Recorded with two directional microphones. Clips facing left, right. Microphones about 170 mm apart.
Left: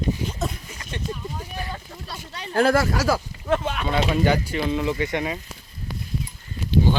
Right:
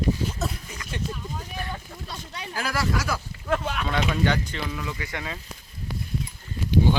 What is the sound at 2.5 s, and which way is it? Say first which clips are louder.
Speech: left 11 dB; 55° left (ahead or behind).